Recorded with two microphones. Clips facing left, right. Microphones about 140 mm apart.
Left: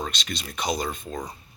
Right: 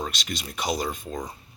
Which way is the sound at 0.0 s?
10° right (ahead or behind).